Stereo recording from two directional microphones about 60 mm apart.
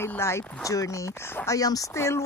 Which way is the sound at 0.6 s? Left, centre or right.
Left.